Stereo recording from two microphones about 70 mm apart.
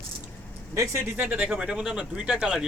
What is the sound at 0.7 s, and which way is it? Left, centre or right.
Speech, right.